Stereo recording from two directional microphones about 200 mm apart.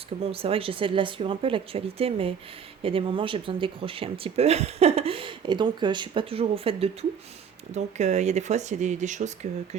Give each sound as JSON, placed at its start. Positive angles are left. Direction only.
{"t": 0.3, "sound": "speech", "side_deg": -30}